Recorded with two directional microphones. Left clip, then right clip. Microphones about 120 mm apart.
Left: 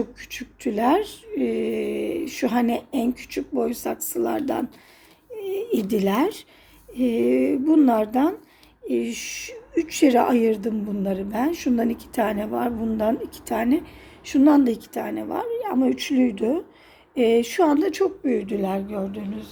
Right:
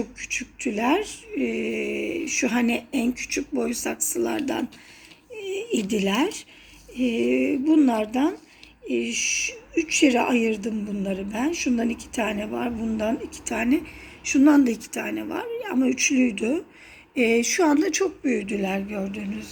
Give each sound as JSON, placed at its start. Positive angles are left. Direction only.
{"t": 0.2, "sound": "a woman's voice", "side_deg": 45}
{"t": 2.5, "sound": "speech", "side_deg": 25}
{"t": 5.4, "sound": "a sound", "side_deg": 35}
{"t": 7.0, "sound": "a woman's voice", "side_deg": 40}
{"t": 17.2, "sound": "a woman's voice", "side_deg": 15}